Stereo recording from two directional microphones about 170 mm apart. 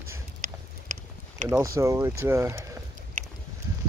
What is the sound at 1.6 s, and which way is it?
Speech, 20° right (ahead or behind).